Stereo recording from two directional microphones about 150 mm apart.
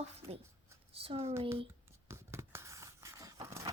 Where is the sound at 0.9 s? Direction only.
40° right (ahead or behind).